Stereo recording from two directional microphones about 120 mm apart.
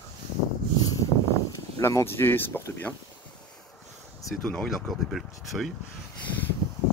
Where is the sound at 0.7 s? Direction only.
30° left (ahead or behind).